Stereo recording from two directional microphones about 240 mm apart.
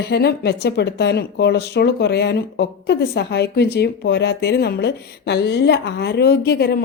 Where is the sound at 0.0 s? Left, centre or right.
Left.